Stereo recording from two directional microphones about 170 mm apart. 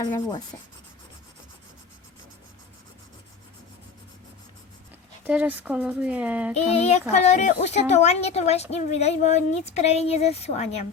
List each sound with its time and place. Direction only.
0.0 s speech: 25° left (ahead or behind)
5.2 s speech: 10° right (ahead or behind)
6.5 s a woman's voice: 40° left (ahead or behind)